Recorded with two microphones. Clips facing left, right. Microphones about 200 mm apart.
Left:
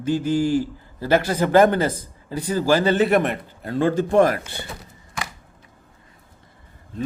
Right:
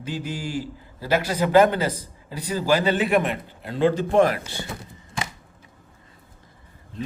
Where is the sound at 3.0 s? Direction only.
45° left (ahead or behind).